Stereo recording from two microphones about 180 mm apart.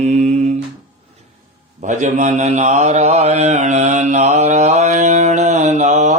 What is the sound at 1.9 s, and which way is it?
Mantra, 40° right (ahead or behind).